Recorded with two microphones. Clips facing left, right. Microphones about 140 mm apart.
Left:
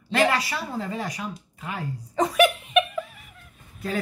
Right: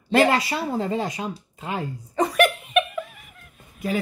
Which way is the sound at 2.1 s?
Centre (ahead or behind).